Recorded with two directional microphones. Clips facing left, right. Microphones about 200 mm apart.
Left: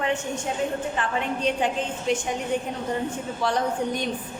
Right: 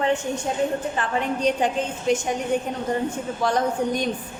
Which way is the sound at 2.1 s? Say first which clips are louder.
Right 3 dB; 45° right (ahead or behind).